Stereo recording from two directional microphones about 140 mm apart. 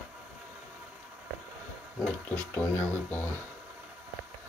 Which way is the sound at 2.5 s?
15° left (ahead or behind).